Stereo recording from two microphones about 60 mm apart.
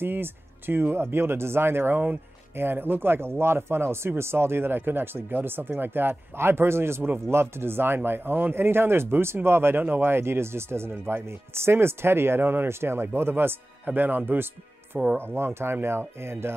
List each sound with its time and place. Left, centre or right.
0.0 s speech: right